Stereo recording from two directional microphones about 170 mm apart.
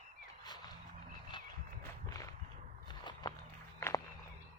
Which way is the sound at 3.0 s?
25° left (ahead or behind).